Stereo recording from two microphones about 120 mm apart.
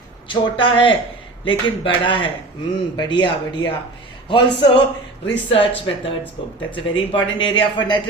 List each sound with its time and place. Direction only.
0.3 s speech: 45° left (ahead or behind)